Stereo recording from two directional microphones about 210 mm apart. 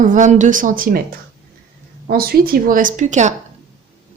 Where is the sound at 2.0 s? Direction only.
45° right (ahead or behind).